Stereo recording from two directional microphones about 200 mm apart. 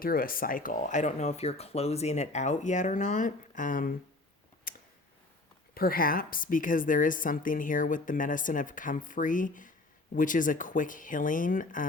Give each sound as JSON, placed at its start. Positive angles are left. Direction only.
{"t": 0.0, "sound": "a woman's voice", "side_deg": 45}
{"t": 4.7, "sound": "tick", "side_deg": 45}
{"t": 5.7, "sound": "a woman's voice", "side_deg": 45}